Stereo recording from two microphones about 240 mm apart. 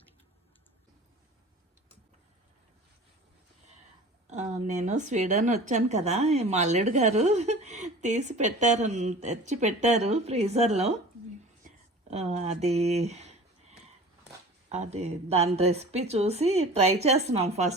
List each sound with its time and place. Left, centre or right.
4.3 s a woman's voice: right
12.1 s a woman's voice: right
14.7 s a woman's voice: right